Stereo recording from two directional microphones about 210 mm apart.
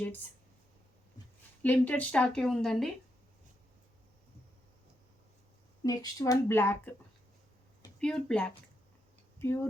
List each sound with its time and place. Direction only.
1.6 s a woman's voice: 10° left (ahead or behind)
5.8 s speech: 20° left (ahead or behind)
7.9 s a woman's voice: 5° left (ahead or behind)